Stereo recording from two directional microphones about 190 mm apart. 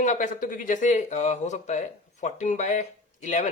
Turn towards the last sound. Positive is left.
turn(degrees=40)  # may be behind; listen again after turning